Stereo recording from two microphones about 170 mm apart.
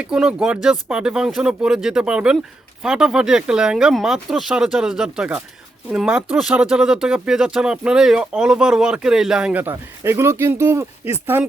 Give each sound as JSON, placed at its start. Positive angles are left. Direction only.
{"t": 0.0, "sound": "speech", "side_deg": -5}